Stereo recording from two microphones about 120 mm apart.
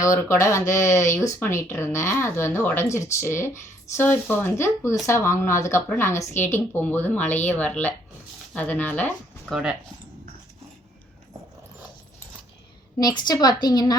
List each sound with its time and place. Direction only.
0.0 s speech: 25° left (ahead or behind)
13.0 s a woman's voice: 35° left (ahead or behind)